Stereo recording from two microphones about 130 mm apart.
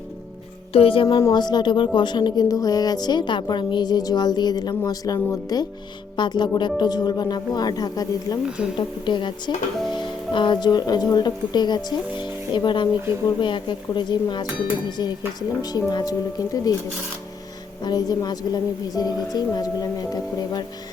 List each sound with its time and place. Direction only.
0.7 s music: 45° left (ahead or behind)
1.0 s a woman's voice: 30° left (ahead or behind)
17.8 s a woman's voice: 30° left (ahead or behind)